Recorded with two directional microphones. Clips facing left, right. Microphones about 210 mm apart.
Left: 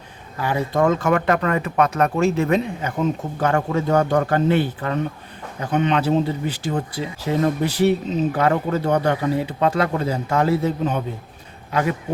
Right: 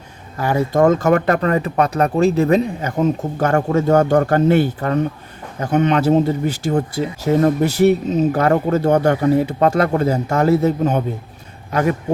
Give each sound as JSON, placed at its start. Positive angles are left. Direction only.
{"t": 0.4, "sound": "speech", "side_deg": -45}